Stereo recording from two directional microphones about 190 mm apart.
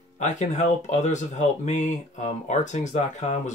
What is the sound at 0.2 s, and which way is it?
Speech, 35° left (ahead or behind).